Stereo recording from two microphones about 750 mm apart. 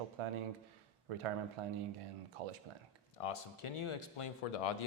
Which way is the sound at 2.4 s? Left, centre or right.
Right.